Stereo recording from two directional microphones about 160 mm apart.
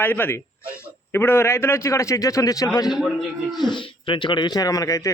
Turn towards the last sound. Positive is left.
turn(degrees=20)  # may be behind; listen again after turning